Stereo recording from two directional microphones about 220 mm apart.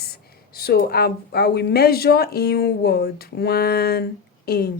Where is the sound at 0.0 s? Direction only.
45° left (ahead or behind).